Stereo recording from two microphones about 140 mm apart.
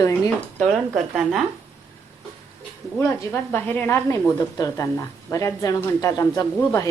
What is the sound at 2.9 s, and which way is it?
A woman's voice, 20° left (ahead or behind).